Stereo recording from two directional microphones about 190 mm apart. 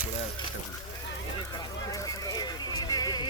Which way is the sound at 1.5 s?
15° left (ahead or behind).